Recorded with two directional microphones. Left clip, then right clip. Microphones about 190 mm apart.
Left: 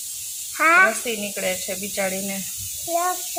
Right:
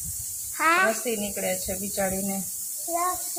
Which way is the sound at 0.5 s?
45° left (ahead or behind).